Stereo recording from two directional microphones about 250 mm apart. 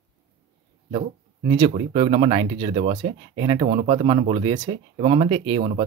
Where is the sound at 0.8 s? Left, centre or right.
Right.